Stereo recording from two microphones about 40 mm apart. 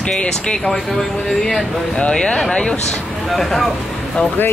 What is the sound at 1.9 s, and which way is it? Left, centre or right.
Speech, left.